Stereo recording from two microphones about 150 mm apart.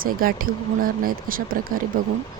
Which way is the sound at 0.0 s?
70° right (ahead or behind).